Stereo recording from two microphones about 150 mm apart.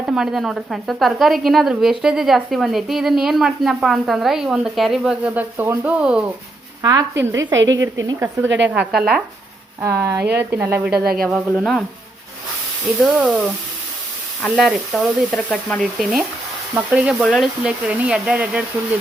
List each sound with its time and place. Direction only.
0.0 s a woman's voice: 5° right (ahead or behind)
6.8 s a woman's voice: 20° right (ahead or behind); by 9.2 s 5° right (ahead or behind)
9.8 s speech: 20° right (ahead or behind)
10.2 s speech: 90° right
10.5 s a woman's voice: 15° right (ahead or behind); by 11.8 s centre (ahead or behind)
13.1 s a woman's voice: centre (ahead or behind)